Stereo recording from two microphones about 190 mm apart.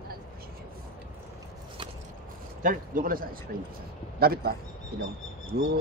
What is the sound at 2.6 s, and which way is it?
A man's voice, 45° right (ahead or behind).